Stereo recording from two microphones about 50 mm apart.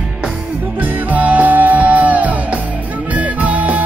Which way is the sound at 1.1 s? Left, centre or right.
Right.